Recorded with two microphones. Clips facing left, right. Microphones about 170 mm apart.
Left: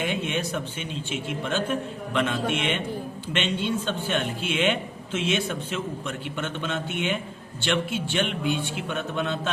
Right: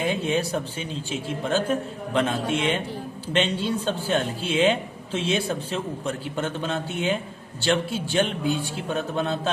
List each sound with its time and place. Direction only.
0.0 s a man's voice: 35° right (ahead or behind)